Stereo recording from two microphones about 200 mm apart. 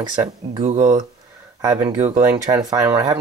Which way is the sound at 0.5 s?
30° right (ahead or behind).